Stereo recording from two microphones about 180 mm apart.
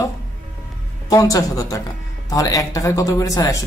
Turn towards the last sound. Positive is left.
turn(degrees=20)  # may be behind; listen again after turning